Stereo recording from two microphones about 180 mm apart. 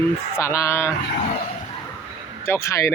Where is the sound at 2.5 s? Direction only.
15° left (ahead or behind).